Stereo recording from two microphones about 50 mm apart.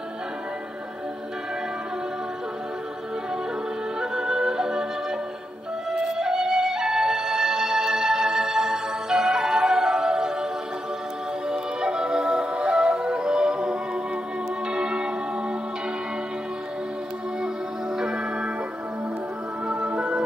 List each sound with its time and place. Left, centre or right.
4.0 s music: centre
5.9 s music: centre
17.9 s organ: centre
19.7 s music: right